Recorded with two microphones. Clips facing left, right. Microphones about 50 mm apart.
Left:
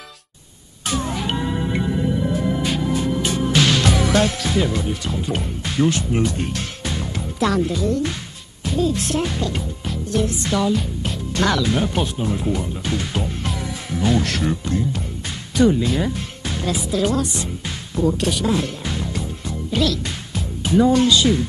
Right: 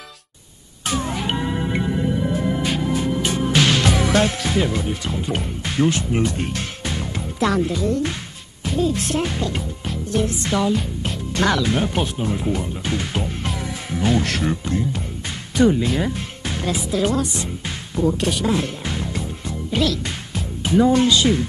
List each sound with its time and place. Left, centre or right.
0.8 s music: right
18.1 s a woman's voice: right